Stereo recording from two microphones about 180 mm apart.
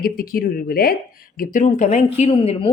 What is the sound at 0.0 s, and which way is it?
Speech, 55° left (ahead or behind).